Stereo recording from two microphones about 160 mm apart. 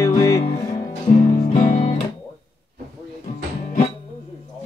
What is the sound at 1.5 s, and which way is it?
Music, 40° left (ahead or behind).